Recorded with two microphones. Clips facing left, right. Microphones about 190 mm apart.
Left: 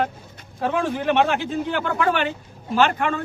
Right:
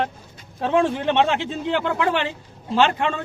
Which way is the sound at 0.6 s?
25° right (ahead or behind).